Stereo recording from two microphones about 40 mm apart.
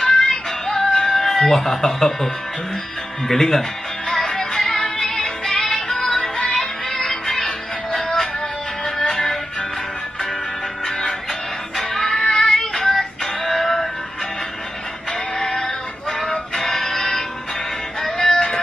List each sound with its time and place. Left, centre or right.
0.0 s music: centre
3.3 s speech: centre
4.1 s music: centre
10.9 s music: centre
15.3 s music: centre